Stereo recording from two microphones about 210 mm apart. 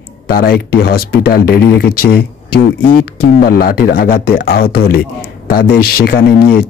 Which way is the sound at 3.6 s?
45° left (ahead or behind).